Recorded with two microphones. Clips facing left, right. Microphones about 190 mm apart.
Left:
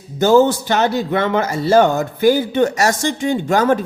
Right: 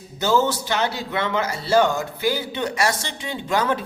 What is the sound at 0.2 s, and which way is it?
Speech, 50° left (ahead or behind).